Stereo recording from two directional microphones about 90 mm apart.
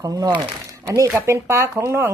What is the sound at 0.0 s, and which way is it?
Speech, 40° right (ahead or behind).